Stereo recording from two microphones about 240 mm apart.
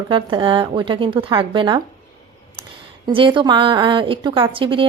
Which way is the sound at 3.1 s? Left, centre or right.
Right.